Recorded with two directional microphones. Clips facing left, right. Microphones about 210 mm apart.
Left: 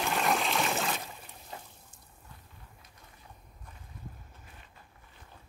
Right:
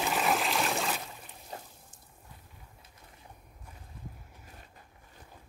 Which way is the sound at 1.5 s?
35° right (ahead or behind).